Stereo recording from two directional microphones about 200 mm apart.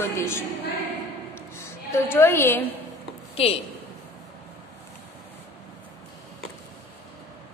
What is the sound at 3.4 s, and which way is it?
Speech, 30° left (ahead or behind).